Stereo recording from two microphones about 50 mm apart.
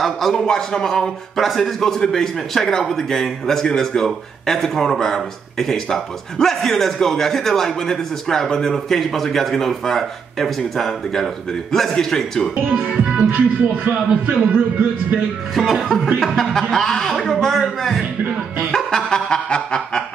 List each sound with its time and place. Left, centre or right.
0.0 s speech: centre
12.9 s music: centre
13.8 s a man's voice: right
15.5 s speech: centre
18.7 s a sound: centre